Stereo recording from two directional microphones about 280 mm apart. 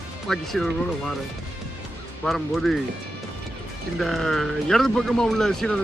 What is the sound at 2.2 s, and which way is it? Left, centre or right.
Speech, centre.